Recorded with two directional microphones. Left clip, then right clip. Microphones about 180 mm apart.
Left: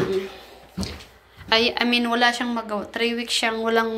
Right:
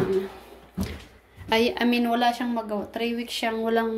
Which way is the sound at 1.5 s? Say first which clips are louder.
Left 3 dB; 30° right (ahead or behind).